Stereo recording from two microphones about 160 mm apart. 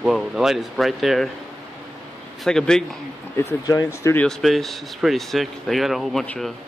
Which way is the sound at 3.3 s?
20° left (ahead or behind).